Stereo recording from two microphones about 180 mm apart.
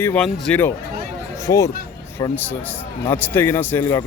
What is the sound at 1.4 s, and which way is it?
Speech, 20° left (ahead or behind).